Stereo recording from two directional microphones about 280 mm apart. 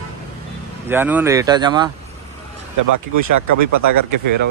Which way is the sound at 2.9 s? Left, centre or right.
Right.